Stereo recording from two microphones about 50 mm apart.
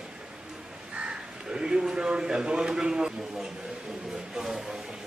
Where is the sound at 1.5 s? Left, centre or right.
Centre.